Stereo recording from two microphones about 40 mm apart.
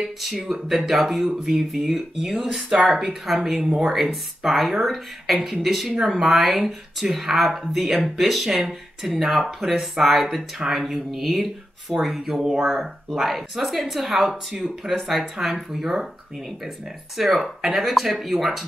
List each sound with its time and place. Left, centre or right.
0.0 s speech: centre
3.9 s speech: centre